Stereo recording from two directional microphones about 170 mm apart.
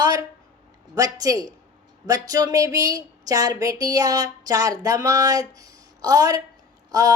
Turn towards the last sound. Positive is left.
turn(degrees=-20)  # may be behind; listen again after turning